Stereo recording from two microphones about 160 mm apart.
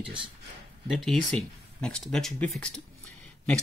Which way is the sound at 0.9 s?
5° left (ahead or behind).